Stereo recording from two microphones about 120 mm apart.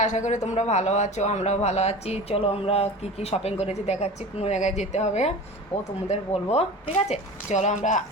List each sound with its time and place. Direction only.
0.0 s a man's voice: 80° left; by 6.7 s 60° left (ahead or behind)
7.1 s a man's voice: 75° left (ahead or behind)